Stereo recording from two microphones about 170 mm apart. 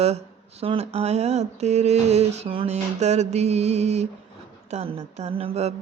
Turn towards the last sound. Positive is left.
turn(degrees=-35)  # may be behind; listen again after turning